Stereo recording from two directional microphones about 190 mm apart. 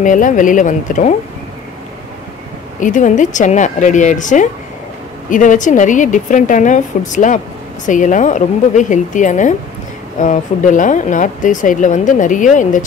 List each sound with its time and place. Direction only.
0.0 s speech: 45° left (ahead or behind)
2.8 s speech: 40° left (ahead or behind)